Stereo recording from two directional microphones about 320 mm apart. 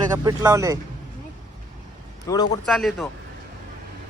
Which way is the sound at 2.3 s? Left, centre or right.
Centre.